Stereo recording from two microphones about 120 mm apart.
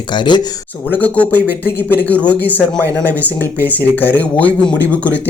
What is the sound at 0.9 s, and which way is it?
Speech, 15° left (ahead or behind).